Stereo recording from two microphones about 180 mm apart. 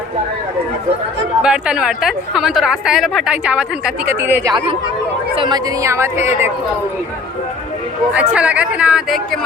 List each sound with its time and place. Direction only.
1.4 s a woman's voice: 5° right (ahead or behind)
5.3 s a woman's voice: 25° right (ahead or behind)
8.1 s a woman's voice: 5° right (ahead or behind)